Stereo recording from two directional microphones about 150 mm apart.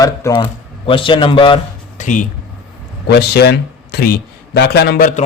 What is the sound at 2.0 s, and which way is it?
Speech, 60° left (ahead or behind).